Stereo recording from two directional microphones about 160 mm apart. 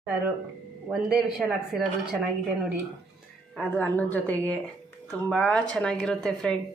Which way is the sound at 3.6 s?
10° left (ahead or behind).